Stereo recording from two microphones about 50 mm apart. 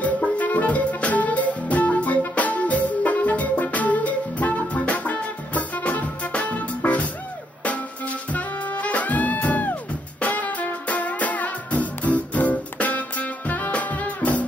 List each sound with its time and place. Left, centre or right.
0.0 s music: left
8.3 s music: left